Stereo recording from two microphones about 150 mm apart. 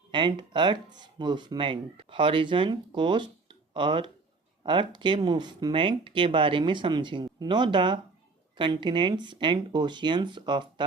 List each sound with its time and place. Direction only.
0.1 s speech: 30° right (ahead or behind)